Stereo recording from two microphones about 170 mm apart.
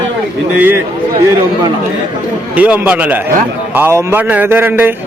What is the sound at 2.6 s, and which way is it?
A man's voice, 10° right (ahead or behind).